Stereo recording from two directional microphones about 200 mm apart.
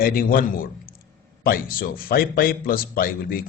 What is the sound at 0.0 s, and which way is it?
Speech, 50° left (ahead or behind).